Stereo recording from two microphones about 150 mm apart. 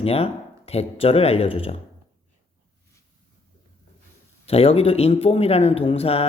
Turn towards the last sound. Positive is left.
turn(degrees=40)  # may be behind; listen again after turning